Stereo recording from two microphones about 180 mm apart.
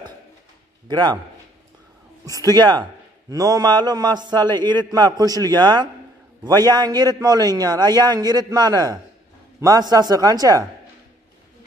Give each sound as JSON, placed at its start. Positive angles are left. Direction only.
{"t": 0.8, "sound": "a man's voice", "side_deg": -25}
{"t": 2.2, "sound": "a man's voice", "side_deg": -20}